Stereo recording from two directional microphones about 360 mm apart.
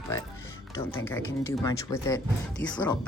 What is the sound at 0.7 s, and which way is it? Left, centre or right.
Speech, centre.